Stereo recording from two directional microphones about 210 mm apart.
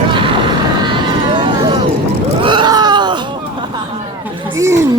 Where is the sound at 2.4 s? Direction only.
20° right (ahead or behind).